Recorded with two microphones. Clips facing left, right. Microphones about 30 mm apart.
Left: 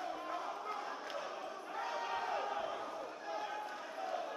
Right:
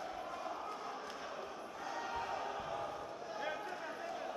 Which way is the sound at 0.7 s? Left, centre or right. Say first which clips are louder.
Left 2 dB; left.